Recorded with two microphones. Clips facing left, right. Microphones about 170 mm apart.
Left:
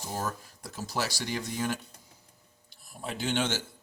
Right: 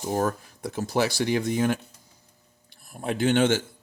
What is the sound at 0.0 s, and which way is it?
Speech, 55° right (ahead or behind).